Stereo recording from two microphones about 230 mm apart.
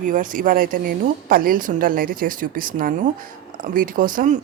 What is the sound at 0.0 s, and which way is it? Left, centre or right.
Speech, right.